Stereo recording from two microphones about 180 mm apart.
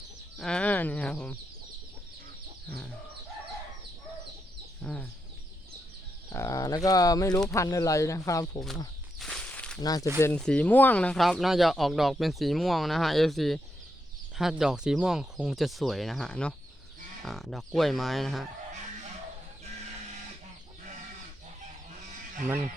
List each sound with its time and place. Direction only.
0.3 s speech: 5° left (ahead or behind)
2.6 s chicken: 5° left (ahead or behind)
4.8 s chicken: 10° left (ahead or behind)
6.3 s speech: 15° left (ahead or behind)
9.1 s walk: 5° left (ahead or behind)
9.8 s speech: 20° left (ahead or behind); by 18.4 s centre (ahead or behind)